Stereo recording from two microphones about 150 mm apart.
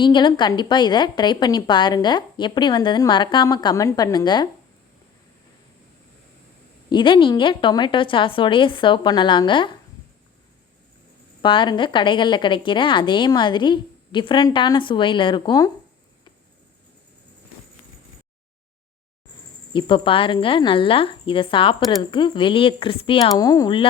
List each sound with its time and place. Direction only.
0.0 s a woman's voice: 30° left (ahead or behind)
6.9 s a woman's voice: 35° left (ahead or behind)
11.4 s a woman's voice: 35° left (ahead or behind)
19.7 s a woman's voice: 35° left (ahead or behind)
23.4 s speech: 25° left (ahead or behind)